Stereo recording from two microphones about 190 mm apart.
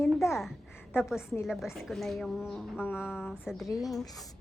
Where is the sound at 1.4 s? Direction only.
Centre (ahead or behind).